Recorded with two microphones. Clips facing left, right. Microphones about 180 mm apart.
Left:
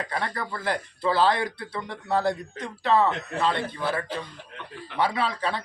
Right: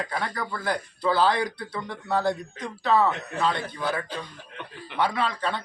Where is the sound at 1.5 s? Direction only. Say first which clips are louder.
Even; 30° left (ahead or behind).